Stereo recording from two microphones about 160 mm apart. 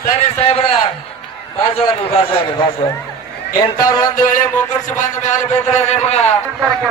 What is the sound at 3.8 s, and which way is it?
Music, 25° left (ahead or behind).